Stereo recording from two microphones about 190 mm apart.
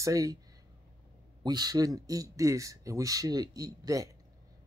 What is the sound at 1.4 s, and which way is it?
Speech, 20° right (ahead or behind).